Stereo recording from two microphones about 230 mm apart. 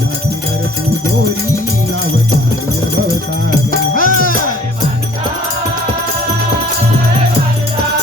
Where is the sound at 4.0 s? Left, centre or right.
Left.